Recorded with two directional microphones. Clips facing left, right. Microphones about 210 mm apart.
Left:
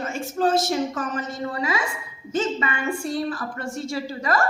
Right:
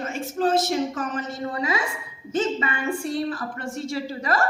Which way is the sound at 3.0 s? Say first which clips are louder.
Even; 40° left (ahead or behind).